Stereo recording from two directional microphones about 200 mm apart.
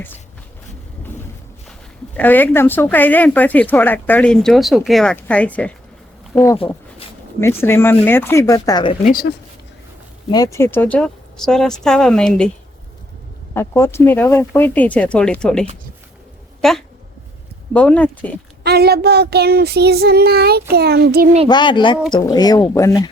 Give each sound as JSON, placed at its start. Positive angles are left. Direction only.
{"t": 2.1, "sound": "speech", "side_deg": 10}
{"t": 7.4, "sound": "speech", "side_deg": 10}
{"t": 10.3, "sound": "speech", "side_deg": 15}
{"t": 13.5, "sound": "speech", "side_deg": 10}
{"t": 18.6, "sound": "child singing", "side_deg": -50}
{"t": 21.5, "sound": "speech", "side_deg": 25}